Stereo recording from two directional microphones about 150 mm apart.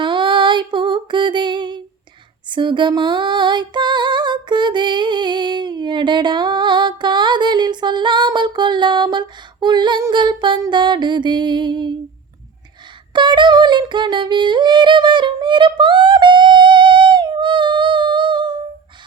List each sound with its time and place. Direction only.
0.0 s music: 35° right (ahead or behind)
2.5 s female singing: 30° right (ahead or behind)
13.1 s music: 30° right (ahead or behind)